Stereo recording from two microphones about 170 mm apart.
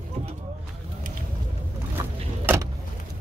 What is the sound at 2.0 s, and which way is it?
Boat, 15° right (ahead or behind).